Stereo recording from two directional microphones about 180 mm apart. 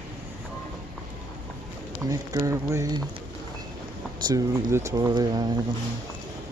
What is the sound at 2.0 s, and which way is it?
Speech, 20° right (ahead or behind).